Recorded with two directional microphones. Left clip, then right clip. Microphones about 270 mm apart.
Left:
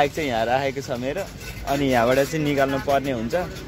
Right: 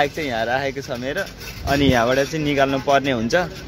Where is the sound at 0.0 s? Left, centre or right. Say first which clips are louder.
Even; centre.